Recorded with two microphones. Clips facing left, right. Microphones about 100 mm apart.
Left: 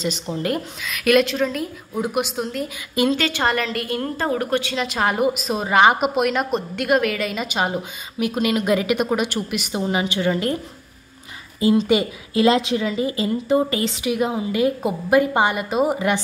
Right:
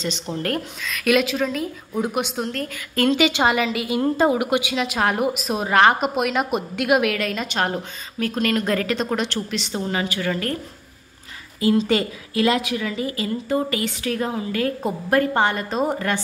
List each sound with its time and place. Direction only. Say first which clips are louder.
0.0 s a woman's voice: left 2 dB; 5° left (ahead or behind)
3.2 s a woman's voice: right 3 dB; 15° right (ahead or behind)
4.7 s a woman's voice: even; centre (ahead or behind); by 10.6 s 20° left (ahead or behind)
11.6 s speech: left 2 dB; 15° left (ahead or behind)